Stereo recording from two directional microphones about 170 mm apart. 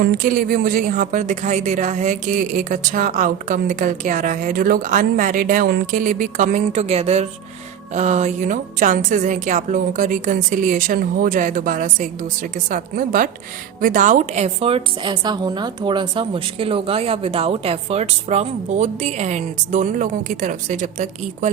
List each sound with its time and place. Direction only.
0.0 s a woman's voice: 60° right (ahead or behind)